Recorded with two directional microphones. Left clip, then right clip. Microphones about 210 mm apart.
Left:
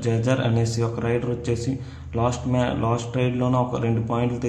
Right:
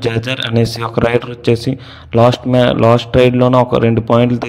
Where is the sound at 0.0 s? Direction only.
40° right (ahead or behind).